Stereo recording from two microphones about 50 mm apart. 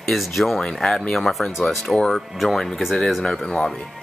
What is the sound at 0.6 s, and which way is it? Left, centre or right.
Speech, centre.